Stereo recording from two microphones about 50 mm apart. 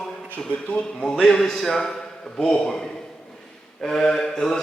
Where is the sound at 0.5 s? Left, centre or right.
Left.